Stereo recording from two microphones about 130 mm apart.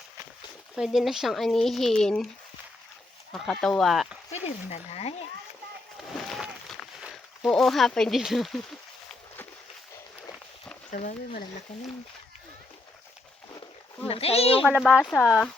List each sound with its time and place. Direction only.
0.8 s speech: centre (ahead or behind)
3.3 s speech: centre (ahead or behind)
4.3 s speech: 55° left (ahead or behind)
6.1 s a sound: centre (ahead or behind)
14.1 s a child's voice: 50° left (ahead or behind)
14.6 s speech: 5° right (ahead or behind)